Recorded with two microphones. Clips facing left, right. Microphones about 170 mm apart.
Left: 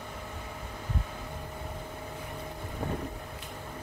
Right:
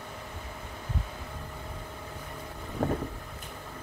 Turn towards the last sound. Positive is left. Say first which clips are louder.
# right 5 dB
turn(degrees=-55)  # may be behind; listen again after turning